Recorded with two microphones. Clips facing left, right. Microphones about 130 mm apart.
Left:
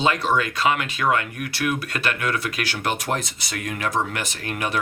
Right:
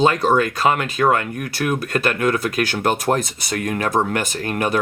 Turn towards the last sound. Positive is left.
turn(degrees=-45)  # may be behind; listen again after turning